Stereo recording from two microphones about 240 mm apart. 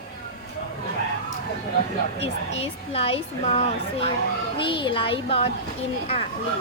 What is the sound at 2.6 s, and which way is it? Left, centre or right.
A woman's voice, left.